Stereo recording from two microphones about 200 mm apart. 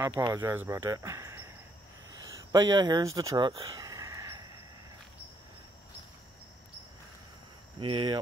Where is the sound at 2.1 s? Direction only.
20° right (ahead or behind).